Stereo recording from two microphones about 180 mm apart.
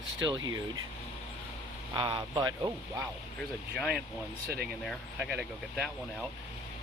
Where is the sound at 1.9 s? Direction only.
25° right (ahead or behind).